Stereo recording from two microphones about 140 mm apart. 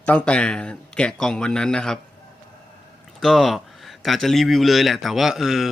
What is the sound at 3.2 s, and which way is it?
A man's voice, centre (ahead or behind).